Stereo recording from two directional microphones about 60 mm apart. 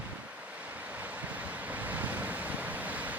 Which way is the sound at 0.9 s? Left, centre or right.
Right.